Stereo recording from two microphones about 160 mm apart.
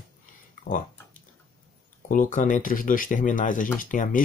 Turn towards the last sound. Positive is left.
turn(degrees=60)  # may be behind; listen again after turning